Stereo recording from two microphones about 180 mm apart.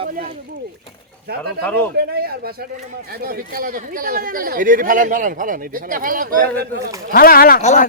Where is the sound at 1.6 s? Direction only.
10° left (ahead or behind).